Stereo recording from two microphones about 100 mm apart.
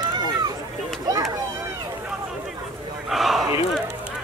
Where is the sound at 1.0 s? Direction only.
40° right (ahead or behind).